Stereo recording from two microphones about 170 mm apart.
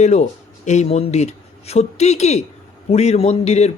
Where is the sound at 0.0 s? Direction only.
40° left (ahead or behind).